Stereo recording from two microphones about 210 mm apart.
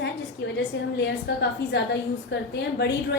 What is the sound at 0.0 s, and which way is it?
A woman's voice, 55° left (ahead or behind).